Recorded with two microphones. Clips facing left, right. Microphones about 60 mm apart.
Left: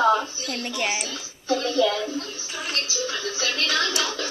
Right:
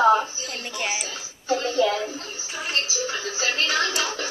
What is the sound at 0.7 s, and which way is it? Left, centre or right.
Speech, centre.